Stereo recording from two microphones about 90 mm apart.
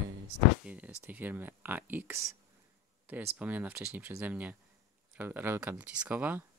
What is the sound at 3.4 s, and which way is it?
Speech, 15° right (ahead or behind).